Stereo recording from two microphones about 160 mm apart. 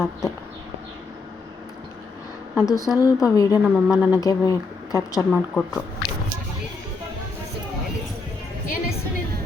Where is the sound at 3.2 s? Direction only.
20° left (ahead or behind).